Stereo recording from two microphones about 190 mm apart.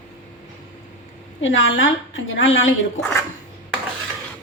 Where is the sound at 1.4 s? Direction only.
90° left.